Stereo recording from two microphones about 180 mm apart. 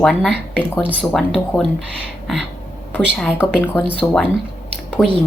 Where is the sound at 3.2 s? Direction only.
5° left (ahead or behind).